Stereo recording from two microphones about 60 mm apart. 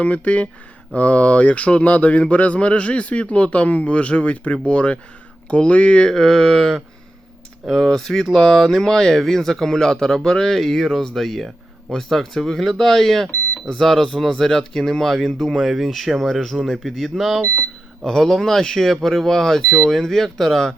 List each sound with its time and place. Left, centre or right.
0.0 s speech: left; by 17.4 s centre
18.0 s speech: centre